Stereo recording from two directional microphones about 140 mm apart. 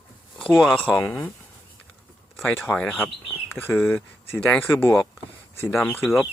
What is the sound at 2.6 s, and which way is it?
Speech, 10° left (ahead or behind).